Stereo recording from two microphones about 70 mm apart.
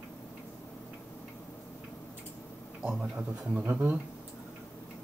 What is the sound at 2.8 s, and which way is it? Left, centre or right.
A man's voice, centre.